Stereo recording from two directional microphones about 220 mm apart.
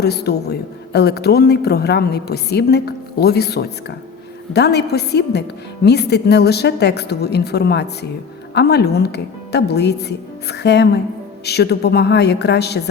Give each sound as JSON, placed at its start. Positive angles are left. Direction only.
{"t": 0.0, "sound": "a woman's voice", "side_deg": 45}